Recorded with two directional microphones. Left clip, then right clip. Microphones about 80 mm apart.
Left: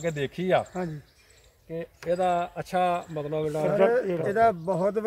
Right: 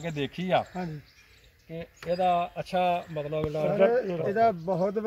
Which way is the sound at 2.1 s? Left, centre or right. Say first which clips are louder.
Even; left.